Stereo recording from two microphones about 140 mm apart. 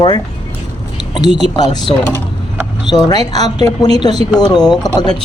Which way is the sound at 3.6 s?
30° left (ahead or behind).